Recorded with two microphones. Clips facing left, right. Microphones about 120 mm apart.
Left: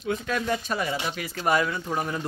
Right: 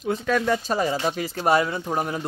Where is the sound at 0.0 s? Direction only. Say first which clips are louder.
Right 5 dB; 40° right (ahead or behind); by 2.2 s 20° right (ahead or behind).